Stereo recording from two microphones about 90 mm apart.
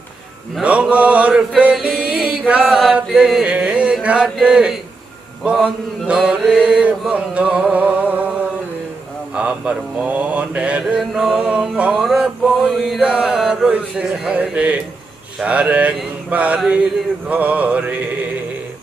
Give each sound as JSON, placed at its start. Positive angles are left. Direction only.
{"t": 0.6, "sound": "mantra", "side_deg": -15}
{"t": 2.5, "sound": "chant", "side_deg": -5}
{"t": 5.5, "sound": "mantra", "side_deg": -10}
{"t": 6.6, "sound": "a sound", "side_deg": -10}
{"t": 9.3, "sound": "mantra", "side_deg": -10}